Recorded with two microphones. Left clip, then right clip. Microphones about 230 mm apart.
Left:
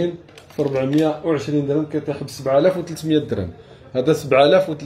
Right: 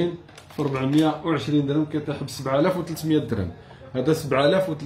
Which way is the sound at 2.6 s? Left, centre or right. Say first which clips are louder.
Left 5 dB; centre.